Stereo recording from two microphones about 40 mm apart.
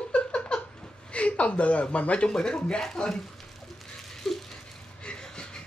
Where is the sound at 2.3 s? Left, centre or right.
Centre.